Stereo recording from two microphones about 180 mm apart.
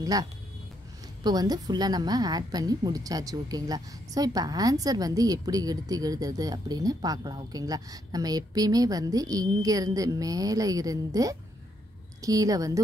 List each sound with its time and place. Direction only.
0.0 s a woman's voice: 20° right (ahead or behind)